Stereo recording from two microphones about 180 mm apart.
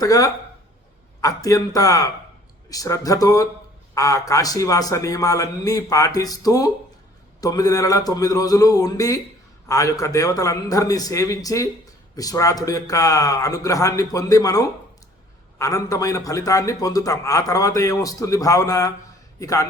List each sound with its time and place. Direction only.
0.0 s a man's voice: 20° left (ahead or behind)